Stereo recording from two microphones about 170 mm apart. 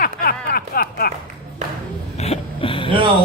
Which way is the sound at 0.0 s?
60° left (ahead or behind).